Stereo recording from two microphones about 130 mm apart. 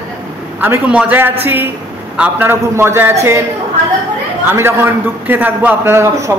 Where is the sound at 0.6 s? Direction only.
10° right (ahead or behind).